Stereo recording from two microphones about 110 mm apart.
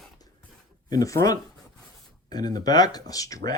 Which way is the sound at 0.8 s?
35° left (ahead or behind).